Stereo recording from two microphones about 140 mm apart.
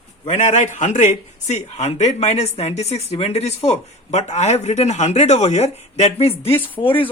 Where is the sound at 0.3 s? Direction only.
60° left (ahead or behind).